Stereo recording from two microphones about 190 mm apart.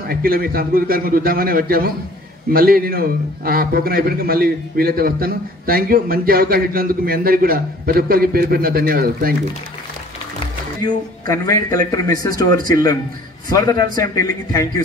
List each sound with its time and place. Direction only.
0.1 s a man's voice: 50° right (ahead or behind)
11.2 s a man's voice: 20° left (ahead or behind)